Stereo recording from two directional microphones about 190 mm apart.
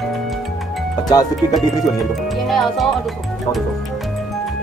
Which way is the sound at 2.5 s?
Centre (ahead or behind).